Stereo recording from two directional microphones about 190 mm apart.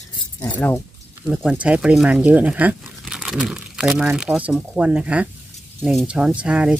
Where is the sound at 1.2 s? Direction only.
5° right (ahead or behind).